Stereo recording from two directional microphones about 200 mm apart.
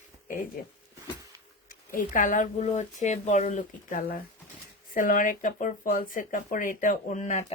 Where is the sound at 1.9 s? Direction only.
40° left (ahead or behind).